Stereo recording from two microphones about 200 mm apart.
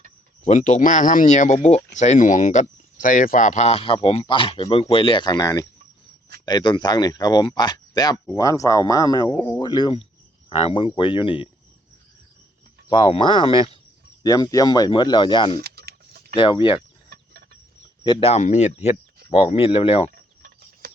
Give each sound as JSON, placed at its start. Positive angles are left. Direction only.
{"t": 0.4, "sound": "speech", "side_deg": 40}
{"t": 12.9, "sound": "speech", "side_deg": 25}
{"t": 15.5, "sound": "a sound", "side_deg": -50}
{"t": 16.3, "sound": "speech", "side_deg": 25}
{"t": 18.0, "sound": "speech", "side_deg": 25}
{"t": 20.4, "sound": "a sound", "side_deg": -50}